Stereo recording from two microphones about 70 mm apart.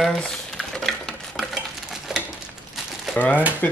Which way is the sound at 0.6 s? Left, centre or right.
Centre.